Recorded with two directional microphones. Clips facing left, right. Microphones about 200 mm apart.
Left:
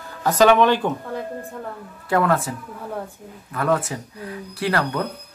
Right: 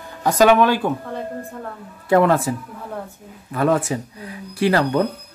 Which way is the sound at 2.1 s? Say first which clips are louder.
Right 4 dB; 25° right (ahead or behind).